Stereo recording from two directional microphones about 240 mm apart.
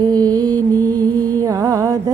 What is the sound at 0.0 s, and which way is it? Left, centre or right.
Mantra, centre.